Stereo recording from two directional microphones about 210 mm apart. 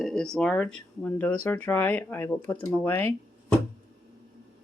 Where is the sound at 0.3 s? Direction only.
5° left (ahead or behind).